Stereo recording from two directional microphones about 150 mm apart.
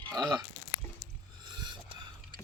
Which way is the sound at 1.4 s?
30° right (ahead or behind).